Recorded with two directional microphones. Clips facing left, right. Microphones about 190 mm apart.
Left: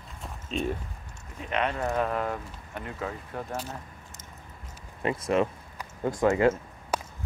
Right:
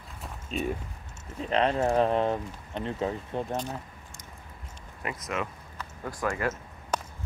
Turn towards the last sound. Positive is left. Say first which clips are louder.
# left 1 dB
turn(degrees=10)  # may be behind; listen again after turning